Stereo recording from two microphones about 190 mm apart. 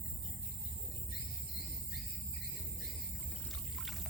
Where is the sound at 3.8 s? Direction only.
Centre (ahead or behind).